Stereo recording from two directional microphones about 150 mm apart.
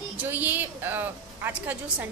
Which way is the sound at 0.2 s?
10° right (ahead or behind).